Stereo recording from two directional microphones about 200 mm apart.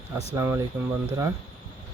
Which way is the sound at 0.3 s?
10° right (ahead or behind).